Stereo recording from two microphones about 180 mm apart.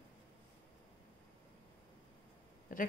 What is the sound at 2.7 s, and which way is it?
Speech, 50° left (ahead or behind).